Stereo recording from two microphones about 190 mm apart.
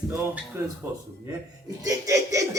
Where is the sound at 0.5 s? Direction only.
15° right (ahead or behind).